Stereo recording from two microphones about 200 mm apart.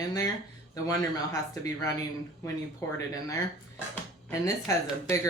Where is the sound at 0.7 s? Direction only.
15° left (ahead or behind).